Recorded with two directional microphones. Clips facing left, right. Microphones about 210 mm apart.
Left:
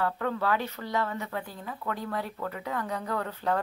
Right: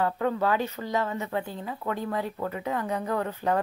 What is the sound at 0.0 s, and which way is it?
A woman's voice, 20° right (ahead or behind).